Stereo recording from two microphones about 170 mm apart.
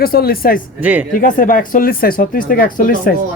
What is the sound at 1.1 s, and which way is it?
Speech, 55° left (ahead or behind).